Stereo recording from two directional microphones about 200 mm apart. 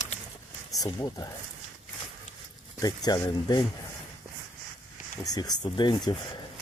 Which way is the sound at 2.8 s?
20° left (ahead or behind).